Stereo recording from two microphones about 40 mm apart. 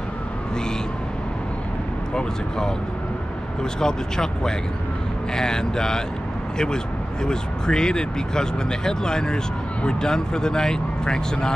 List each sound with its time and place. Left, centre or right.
3.8 s speech: centre
7.2 s speech: centre